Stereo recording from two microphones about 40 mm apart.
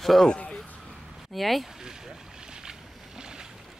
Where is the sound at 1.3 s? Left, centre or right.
Centre.